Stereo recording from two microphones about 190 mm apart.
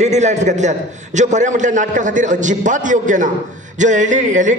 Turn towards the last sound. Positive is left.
turn(degrees=-40)  # may be behind; listen again after turning